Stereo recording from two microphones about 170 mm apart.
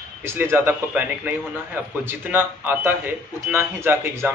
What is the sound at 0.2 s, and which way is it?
Speech, 15° right (ahead or behind).